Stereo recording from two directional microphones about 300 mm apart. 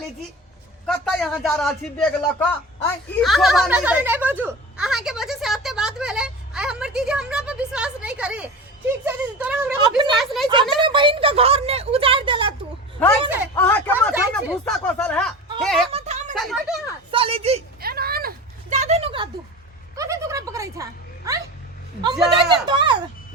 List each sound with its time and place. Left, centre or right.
0.9 s a man's voice: centre
10.1 s a sound: centre
10.5 s a woman's voice: centre
13.6 s speech: centre
14.1 s a man's voice: centre
15.9 s a sound: right
16.3 s a child's voice: centre
17.1 s a woman's voice: centre
17.7 s a sound: right; by 21.4 s centre
22.4 s a woman's voice: centre